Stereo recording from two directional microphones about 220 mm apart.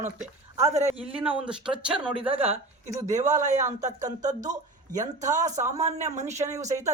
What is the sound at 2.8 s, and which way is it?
Speech, 30° right (ahead or behind).